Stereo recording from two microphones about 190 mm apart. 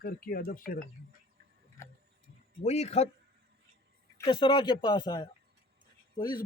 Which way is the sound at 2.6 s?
35° left (ahead or behind).